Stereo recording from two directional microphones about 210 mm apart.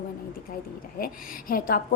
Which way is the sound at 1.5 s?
45° left (ahead or behind).